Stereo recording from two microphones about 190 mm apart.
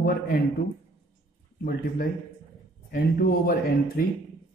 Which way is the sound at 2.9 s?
55° left (ahead or behind).